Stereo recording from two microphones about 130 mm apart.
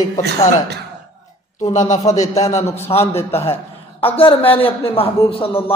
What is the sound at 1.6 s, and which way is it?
Speech, 65° left (ahead or behind).